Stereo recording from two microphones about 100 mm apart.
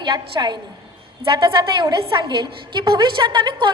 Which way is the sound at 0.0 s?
45° right (ahead or behind).